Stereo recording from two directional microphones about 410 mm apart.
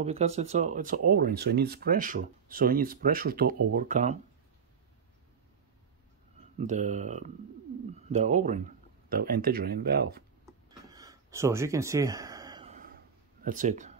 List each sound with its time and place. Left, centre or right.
0.0 s speech: centre
6.6 s speech: centre
10.4 s a sound: centre